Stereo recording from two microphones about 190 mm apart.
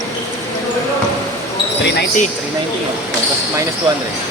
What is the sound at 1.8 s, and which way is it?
Speech, 65° left (ahead or behind).